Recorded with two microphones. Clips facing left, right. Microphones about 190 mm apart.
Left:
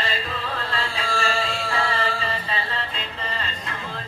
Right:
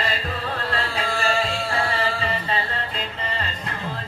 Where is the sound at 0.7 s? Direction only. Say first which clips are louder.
Right 3 dB; 40° right (ahead or behind).